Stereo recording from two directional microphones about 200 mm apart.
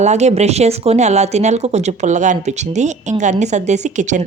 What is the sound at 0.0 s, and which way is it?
Speech, 35° right (ahead or behind).